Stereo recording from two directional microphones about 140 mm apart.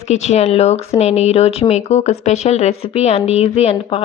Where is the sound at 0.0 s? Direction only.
55° left (ahead or behind).